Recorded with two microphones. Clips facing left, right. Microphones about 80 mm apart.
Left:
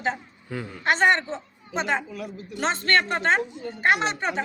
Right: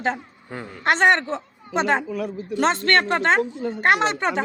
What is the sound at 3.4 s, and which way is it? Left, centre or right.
Speech, right.